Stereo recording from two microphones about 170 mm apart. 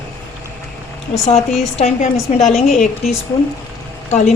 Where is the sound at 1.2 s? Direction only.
40° left (ahead or behind).